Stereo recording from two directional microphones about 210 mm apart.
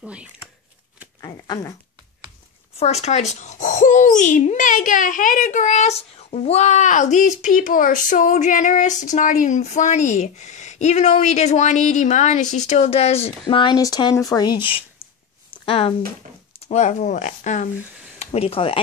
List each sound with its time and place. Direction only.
0.0 s speech: 5° right (ahead or behind)
1.2 s a sound: 15° left (ahead or behind)
2.8 s a child's voice: 30° left (ahead or behind)
15.6 s a child's voice: 25° left (ahead or behind)